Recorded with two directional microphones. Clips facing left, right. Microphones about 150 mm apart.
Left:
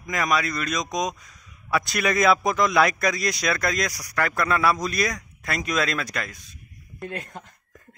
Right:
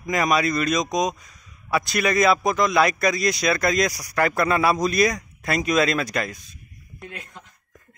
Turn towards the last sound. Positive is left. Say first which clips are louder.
# left 5 dB
turn(degrees=45)  # may be behind; listen again after turning